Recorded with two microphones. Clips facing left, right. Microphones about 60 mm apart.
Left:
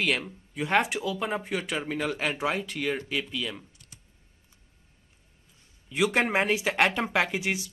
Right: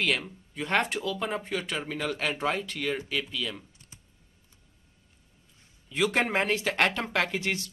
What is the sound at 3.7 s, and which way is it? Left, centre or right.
Typing, right.